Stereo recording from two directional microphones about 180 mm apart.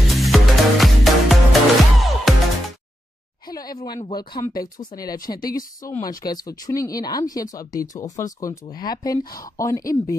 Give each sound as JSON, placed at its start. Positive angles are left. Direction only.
{"t": 0.0, "sound": "music", "side_deg": 0}
{"t": 3.4, "sound": "speech", "side_deg": 20}